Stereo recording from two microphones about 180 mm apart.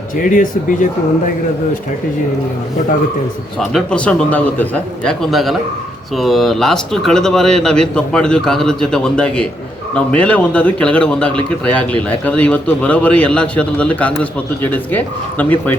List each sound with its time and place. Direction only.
0.2 s speech: 45° left (ahead or behind)
3.6 s speech: centre (ahead or behind)